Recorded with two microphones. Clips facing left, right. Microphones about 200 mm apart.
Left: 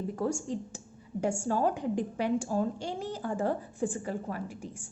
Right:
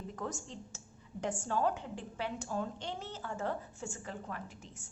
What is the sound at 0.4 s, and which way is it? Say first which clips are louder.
A woman's voice: left 12 dB; 10° left (ahead or behind).